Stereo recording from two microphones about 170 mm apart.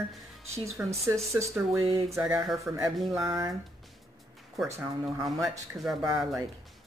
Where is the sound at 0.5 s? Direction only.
15° right (ahead or behind).